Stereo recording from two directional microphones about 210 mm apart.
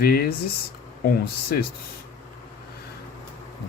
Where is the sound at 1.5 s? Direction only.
45° left (ahead or behind).